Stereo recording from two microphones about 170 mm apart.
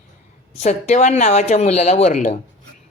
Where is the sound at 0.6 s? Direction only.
40° left (ahead or behind).